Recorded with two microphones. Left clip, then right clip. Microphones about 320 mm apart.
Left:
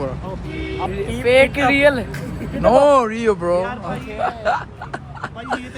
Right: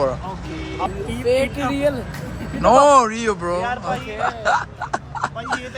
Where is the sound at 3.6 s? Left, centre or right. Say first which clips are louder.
Right 3 dB; right.